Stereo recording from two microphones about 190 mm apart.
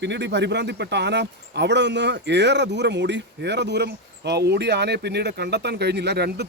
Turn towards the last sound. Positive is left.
turn(degrees=-60)  # may be behind; listen again after turning